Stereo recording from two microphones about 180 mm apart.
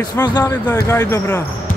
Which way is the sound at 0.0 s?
20° left (ahead or behind).